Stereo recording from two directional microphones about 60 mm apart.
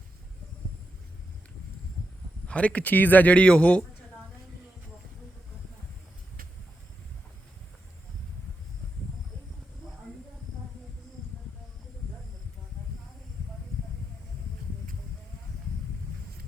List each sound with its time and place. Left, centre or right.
2.5 s speech: left